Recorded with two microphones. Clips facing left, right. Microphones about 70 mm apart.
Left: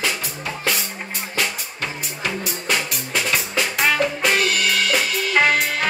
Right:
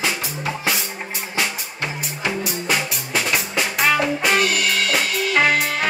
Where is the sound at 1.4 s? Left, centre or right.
Centre.